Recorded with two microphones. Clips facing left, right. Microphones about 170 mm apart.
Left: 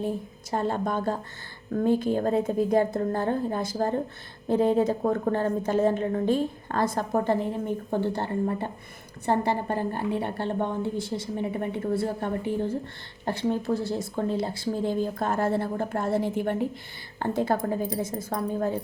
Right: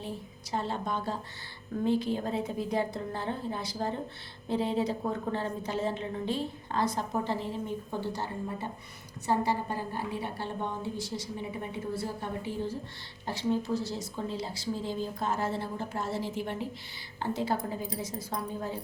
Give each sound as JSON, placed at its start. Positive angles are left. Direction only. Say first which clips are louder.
{"t": 0.5, "sound": "a woman's voice", "louder": "left 6 dB", "side_deg": 50}